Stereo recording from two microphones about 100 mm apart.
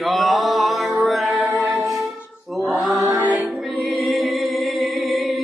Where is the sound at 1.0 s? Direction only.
Centre (ahead or behind).